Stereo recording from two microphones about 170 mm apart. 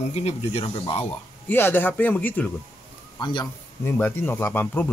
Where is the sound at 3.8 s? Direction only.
15° left (ahead or behind).